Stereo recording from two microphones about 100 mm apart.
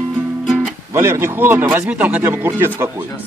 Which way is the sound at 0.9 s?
25° right (ahead or behind).